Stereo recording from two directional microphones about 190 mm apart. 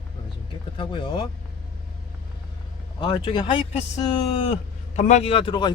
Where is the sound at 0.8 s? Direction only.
25° left (ahead or behind).